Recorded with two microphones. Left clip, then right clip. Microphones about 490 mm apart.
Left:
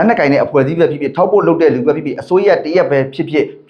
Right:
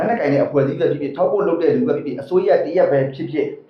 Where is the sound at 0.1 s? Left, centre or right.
Left.